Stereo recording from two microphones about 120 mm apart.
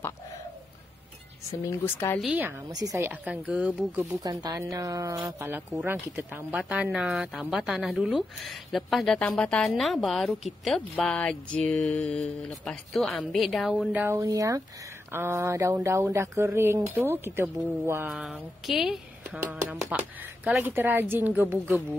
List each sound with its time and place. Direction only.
1.7 s speech: 20° left (ahead or behind)
2.2 s speech: 15° right (ahead or behind)
2.7 s a woman's voice: 30° right (ahead or behind)
3.1 s speech: 10° right (ahead or behind)
4.0 s a woman's voice: 30° right (ahead or behind)
6.6 s a woman's voice: 5° right (ahead or behind)
14.0 s a woman's voice: 25° right (ahead or behind)
18.0 s speech: 5° right (ahead or behind)